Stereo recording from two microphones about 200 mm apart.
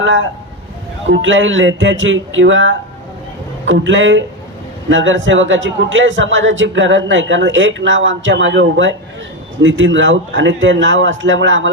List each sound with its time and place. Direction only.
0.0 s a man's voice: 70° right (ahead or behind)